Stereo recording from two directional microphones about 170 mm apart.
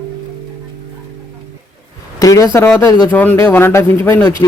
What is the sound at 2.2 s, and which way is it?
A man's voice, 20° left (ahead or behind).